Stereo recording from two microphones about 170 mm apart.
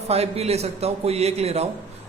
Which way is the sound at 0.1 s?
35° right (ahead or behind).